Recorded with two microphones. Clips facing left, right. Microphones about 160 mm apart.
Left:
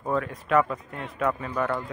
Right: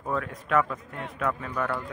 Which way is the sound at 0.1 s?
Centre (ahead or behind).